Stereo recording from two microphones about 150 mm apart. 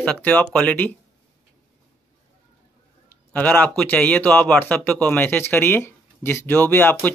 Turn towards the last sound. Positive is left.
turn(degrees=10)  # may be behind; listen again after turning